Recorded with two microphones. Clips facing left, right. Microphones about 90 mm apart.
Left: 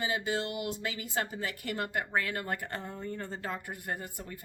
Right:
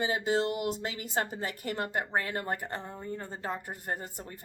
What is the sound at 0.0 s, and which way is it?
Speech, 35° right (ahead or behind).